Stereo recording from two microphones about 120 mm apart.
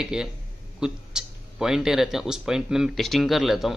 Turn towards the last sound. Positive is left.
turn(degrees=0)  # may be behind; listen again after turning